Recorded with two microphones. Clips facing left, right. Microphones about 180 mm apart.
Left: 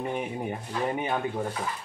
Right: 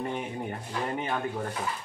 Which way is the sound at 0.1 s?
10° left (ahead or behind).